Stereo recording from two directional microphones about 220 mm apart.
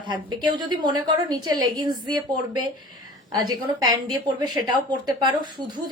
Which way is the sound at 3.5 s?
20° right (ahead or behind).